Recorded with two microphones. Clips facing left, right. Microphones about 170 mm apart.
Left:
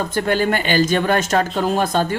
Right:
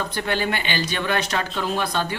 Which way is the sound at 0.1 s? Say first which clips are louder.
Left 6 dB; 45° left (ahead or behind).